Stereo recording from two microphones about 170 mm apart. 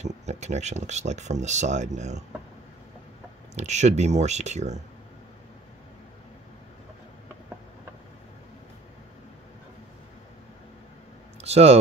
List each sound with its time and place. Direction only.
0.0 s speech: 40° right (ahead or behind)
3.5 s speech: 40° right (ahead or behind)
11.4 s speech: 40° right (ahead or behind)